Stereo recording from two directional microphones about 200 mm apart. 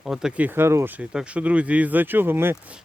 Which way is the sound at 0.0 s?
5° right (ahead or behind).